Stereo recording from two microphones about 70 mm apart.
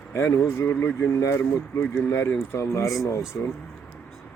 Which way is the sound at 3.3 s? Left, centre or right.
Left.